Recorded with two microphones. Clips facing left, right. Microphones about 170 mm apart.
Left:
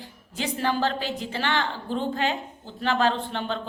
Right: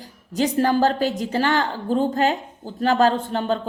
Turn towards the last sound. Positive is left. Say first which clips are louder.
# right 6 dB
turn(degrees=-40)  # may be behind; listen again after turning